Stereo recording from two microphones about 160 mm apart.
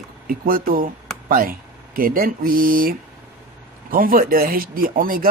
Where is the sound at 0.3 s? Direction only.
65° right (ahead or behind).